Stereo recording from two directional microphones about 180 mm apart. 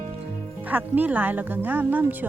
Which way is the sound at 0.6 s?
10° right (ahead or behind).